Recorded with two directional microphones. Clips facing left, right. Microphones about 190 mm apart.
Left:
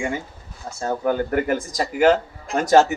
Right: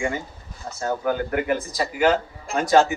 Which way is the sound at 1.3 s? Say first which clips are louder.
Left 2 dB; 45° left (ahead or behind).